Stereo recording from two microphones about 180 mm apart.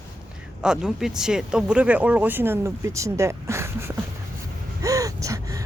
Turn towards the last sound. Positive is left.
turn(degrees=-20)  # may be behind; listen again after turning